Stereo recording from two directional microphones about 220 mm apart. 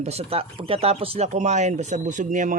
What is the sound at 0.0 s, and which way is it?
Speech, 30° right (ahead or behind).